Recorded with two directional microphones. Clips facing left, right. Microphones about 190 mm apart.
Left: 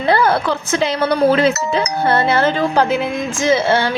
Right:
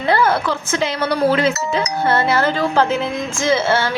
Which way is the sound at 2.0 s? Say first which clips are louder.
Left 2 dB; 30° left (ahead or behind).